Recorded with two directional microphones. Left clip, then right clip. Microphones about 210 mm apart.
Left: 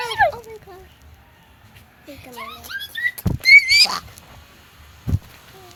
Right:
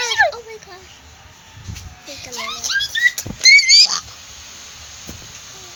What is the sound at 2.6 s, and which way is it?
Rodents, 10° right (ahead or behind).